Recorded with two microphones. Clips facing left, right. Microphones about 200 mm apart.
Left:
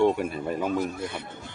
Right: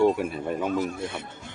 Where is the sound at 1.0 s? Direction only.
25° right (ahead or behind).